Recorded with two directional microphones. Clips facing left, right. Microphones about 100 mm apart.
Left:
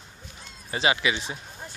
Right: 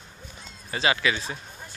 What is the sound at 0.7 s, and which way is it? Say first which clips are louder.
Speech: even; 25° left (ahead or behind).